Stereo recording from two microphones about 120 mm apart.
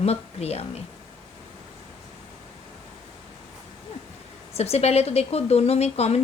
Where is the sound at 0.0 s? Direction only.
60° left (ahead or behind).